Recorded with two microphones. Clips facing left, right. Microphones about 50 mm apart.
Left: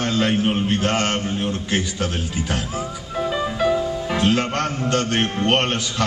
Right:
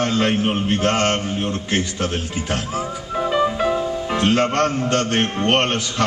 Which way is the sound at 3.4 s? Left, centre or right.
Centre.